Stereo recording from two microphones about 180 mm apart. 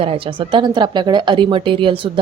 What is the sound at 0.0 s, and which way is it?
A woman's voice, 30° right (ahead or behind).